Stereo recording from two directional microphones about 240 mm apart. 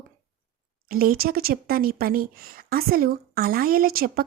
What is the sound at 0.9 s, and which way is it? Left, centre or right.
Speech, right.